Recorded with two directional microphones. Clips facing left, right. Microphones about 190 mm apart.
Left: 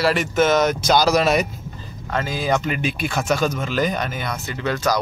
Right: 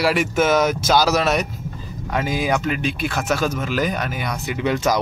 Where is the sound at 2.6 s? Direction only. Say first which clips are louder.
Right 1 dB; centre (ahead or behind).